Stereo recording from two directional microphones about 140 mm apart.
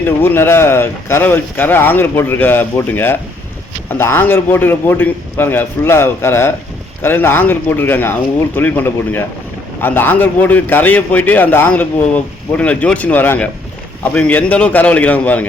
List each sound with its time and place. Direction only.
0.0 s a man's voice: 15° left (ahead or behind)